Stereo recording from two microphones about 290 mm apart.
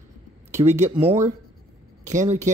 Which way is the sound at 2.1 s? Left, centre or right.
Right.